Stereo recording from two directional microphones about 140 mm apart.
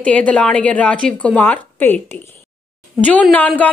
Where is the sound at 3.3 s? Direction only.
10° left (ahead or behind).